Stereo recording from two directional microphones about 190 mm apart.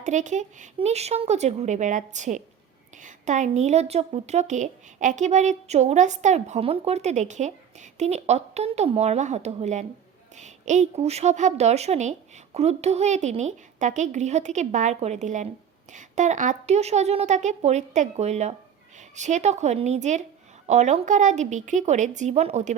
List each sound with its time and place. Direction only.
0.0 s a woman's voice: 40° right (ahead or behind)